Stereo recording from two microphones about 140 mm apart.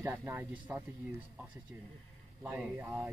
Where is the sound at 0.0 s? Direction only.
20° right (ahead or behind).